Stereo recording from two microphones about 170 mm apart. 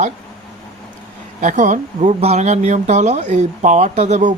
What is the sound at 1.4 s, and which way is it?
Speech, 45° right (ahead or behind).